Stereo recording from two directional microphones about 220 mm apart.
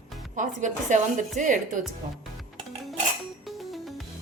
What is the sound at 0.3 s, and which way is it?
A woman's voice, 35° right (ahead or behind).